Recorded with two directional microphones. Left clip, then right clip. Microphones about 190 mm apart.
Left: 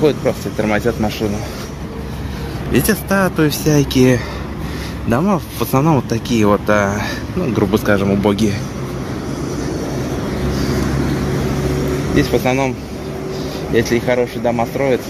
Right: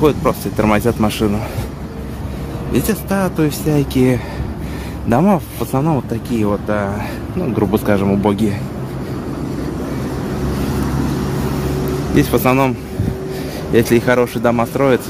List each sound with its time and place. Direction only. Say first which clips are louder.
0.0 s speech: right 1 dB; 25° right (ahead or behind)
2.7 s speech: left 3 dB; 5° right (ahead or behind)
5.7 s speech: left 3 dB; 5° left (ahead or behind)
7.5 s speech: left 1 dB; 10° right (ahead or behind)
12.2 s speech: right 2 dB; 25° right (ahead or behind)
13.7 s speech: right 2 dB; 25° right (ahead or behind)